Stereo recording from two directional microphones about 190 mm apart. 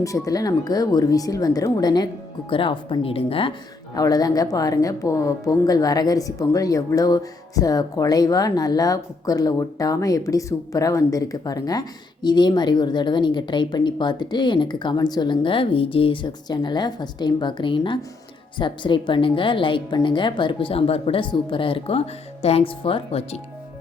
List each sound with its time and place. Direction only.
0.0 s a woman's voice: 15° left (ahead or behind)